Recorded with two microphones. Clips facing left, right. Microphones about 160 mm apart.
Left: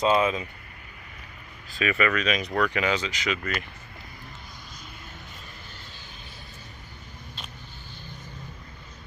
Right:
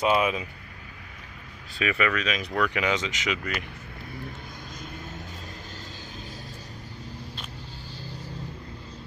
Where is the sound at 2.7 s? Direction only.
15° right (ahead or behind).